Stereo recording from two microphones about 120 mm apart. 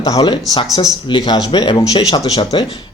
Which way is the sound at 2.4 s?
45° left (ahead or behind).